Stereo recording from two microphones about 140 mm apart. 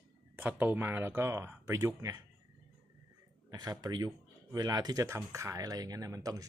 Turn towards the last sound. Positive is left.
turn(degrees=-25)  # may be behind; listen again after turning